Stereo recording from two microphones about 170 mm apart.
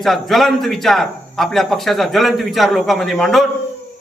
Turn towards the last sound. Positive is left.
turn(degrees=0)  # may be behind; listen again after turning